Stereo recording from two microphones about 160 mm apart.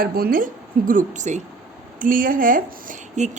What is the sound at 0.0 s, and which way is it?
Speech, 65° right (ahead or behind).